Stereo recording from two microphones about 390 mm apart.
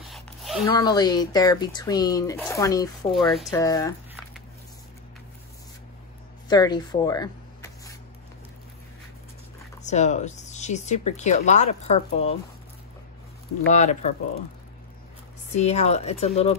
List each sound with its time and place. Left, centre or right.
0.1 s speech: centre
6.5 s a sound: centre
9.8 s speech: centre
13.7 s speech: centre
15.5 s speech: centre